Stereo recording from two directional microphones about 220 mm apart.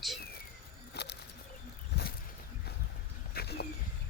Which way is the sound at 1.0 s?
50° left (ahead or behind).